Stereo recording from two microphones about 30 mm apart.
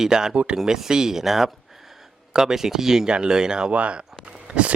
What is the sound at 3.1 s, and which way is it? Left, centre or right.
Speech, right.